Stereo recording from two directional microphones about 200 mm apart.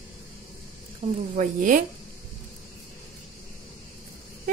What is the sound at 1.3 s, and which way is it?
Speech, 40° right (ahead or behind).